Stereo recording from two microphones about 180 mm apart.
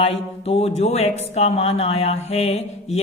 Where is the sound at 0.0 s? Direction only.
35° left (ahead or behind).